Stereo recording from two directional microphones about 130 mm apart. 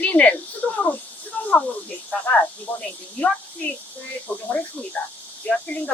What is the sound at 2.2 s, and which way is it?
Speech, 10° left (ahead or behind).